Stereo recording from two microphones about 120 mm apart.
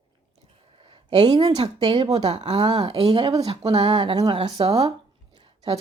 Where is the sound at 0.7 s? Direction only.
40° right (ahead or behind).